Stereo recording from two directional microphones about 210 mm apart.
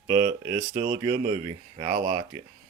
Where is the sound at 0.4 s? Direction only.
20° right (ahead or behind).